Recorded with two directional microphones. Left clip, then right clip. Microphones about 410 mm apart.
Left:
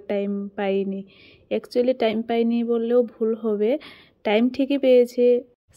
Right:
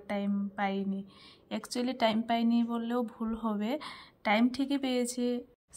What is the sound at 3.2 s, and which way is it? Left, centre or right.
Speech, right.